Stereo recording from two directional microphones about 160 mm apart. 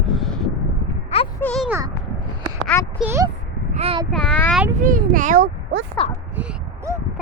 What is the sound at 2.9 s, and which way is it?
Speech, 10° right (ahead or behind).